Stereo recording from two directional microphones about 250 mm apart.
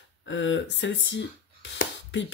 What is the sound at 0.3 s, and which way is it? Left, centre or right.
Speech, left.